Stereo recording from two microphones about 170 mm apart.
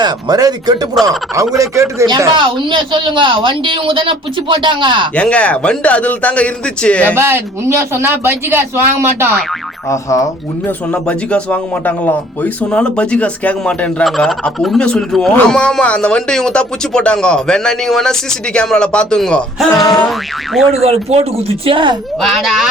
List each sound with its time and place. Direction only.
0.0 s speech: 25° right (ahead or behind)
5.1 s a man's voice: 5° left (ahead or behind)
7.2 s speech: 15° right (ahead or behind)
9.9 s speech: 20° left (ahead or behind)
10.7 s speech: 5° left (ahead or behind)
20.8 s speech: 35° right (ahead or behind)
22.2 s speech: centre (ahead or behind)